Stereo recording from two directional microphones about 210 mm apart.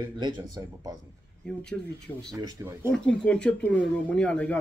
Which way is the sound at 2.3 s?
15° right (ahead or behind).